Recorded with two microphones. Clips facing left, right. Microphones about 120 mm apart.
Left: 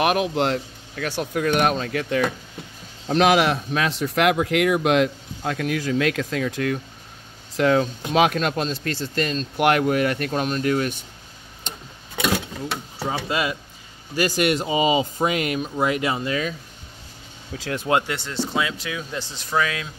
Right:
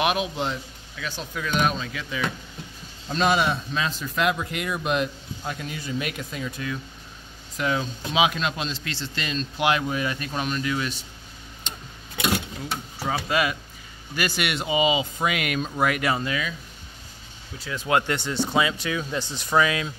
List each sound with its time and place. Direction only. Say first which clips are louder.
0.0 s speech: left 4 dB; 45° left (ahead or behind)
0.9 s speech: left 8 dB; 60° left (ahead or behind)
3.1 s speech: left 5 dB; 85° left
3.5 s speech: left 4 dB; 70° left (ahead or behind); by 9.7 s 45° left (ahead or behind)
9.7 s speech: left 6 dB; 65° left (ahead or behind)
13.3 s speech: right 1 dB; 25° left (ahead or behind)
14.1 s speech: left 6 dB; 35° left (ahead or behind)
17.6 s speech: left 5 dB; 60° left (ahead or behind)
18.0 s speech: right 1 dB; centre (ahead or behind)